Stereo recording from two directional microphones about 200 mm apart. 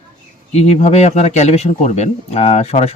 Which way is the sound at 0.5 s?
35° left (ahead or behind).